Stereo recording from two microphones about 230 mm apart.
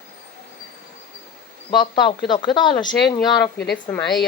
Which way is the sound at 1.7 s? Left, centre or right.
Centre.